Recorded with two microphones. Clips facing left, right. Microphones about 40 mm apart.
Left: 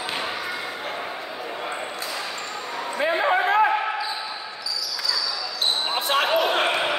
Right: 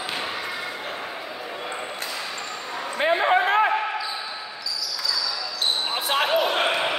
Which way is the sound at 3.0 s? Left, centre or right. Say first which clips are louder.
Right 2 dB; right.